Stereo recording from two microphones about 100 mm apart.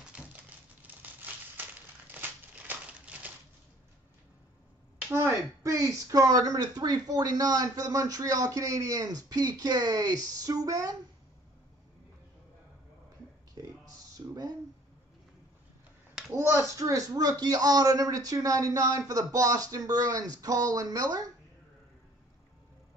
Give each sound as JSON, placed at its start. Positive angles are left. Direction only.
{"t": 0.1, "sound": "a sound", "side_deg": -10}
{"t": 1.0, "sound": "crushing", "side_deg": -15}
{"t": 2.1, "sound": "a sound", "side_deg": -20}
{"t": 5.1, "sound": "speech", "side_deg": -30}
{"t": 13.6, "sound": "music", "side_deg": -40}
{"t": 14.1, "sound": "speech", "side_deg": -35}
{"t": 16.3, "sound": "speech", "side_deg": -25}